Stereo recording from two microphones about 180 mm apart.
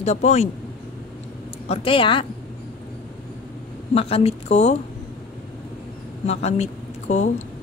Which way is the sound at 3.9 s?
35° left (ahead or behind).